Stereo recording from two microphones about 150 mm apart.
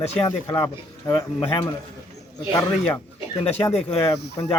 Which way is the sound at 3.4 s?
20° left (ahead or behind).